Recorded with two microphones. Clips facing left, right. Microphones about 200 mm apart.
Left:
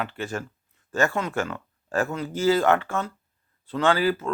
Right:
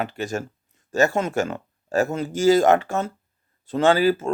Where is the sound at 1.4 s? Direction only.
25° right (ahead or behind).